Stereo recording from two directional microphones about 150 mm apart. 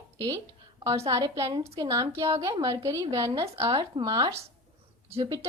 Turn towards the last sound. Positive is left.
turn(degrees=-25)  # may be behind; listen again after turning